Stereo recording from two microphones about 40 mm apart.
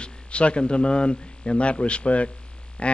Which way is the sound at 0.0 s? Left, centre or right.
Left.